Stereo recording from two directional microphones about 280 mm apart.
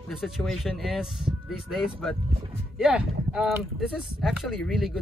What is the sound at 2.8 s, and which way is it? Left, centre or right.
Speech, centre.